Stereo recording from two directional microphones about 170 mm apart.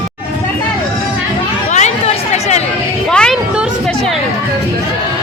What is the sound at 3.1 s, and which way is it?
Music, 5° left (ahead or behind).